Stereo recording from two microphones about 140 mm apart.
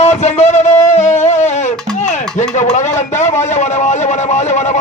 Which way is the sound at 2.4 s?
60° left (ahead or behind).